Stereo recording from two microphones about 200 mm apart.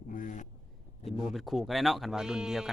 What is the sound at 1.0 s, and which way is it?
A woman's voice, centre (ahead or behind).